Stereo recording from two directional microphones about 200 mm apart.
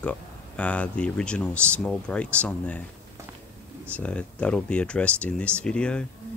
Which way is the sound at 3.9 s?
5° left (ahead or behind).